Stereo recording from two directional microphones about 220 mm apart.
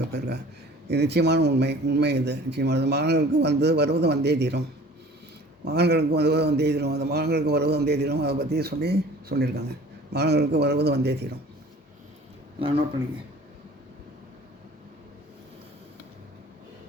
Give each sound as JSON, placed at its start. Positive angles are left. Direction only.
{"t": 0.1, "sound": "a sound", "side_deg": -50}
{"t": 0.9, "sound": "speech", "side_deg": -50}
{"t": 5.6, "sound": "speech", "side_deg": -50}
{"t": 12.5, "sound": "a man's voice", "side_deg": -25}